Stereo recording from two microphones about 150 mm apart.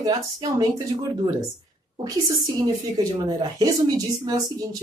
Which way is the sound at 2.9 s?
25° right (ahead or behind).